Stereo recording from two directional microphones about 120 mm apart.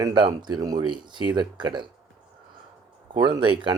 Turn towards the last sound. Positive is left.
turn(degrees=-40)  # may be behind; listen again after turning